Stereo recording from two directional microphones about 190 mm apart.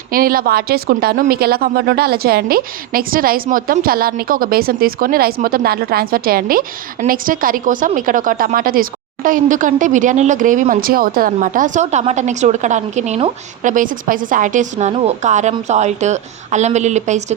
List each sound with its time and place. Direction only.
0.1 s a woman's voice: 50° right (ahead or behind)